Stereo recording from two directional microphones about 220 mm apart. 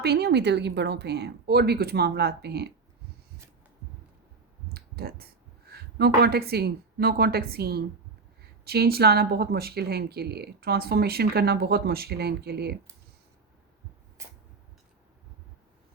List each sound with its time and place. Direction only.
0.0 s speech: 45° right (ahead or behind)
4.7 s speech: 45° right (ahead or behind)